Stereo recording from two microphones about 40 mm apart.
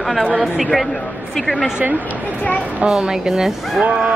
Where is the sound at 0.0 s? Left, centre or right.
Centre.